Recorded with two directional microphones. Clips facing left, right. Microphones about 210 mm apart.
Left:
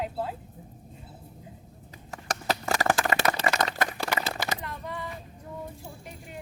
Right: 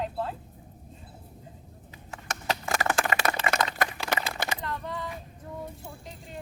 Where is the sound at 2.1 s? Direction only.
40° left (ahead or behind).